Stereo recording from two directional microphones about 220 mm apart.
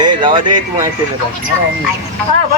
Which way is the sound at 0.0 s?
20° right (ahead or behind).